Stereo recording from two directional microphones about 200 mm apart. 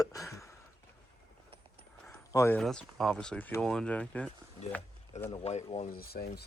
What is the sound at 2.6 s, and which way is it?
Speech, centre (ahead or behind).